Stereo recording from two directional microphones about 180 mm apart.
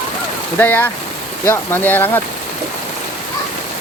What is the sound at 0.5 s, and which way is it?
Speech, 10° left (ahead or behind).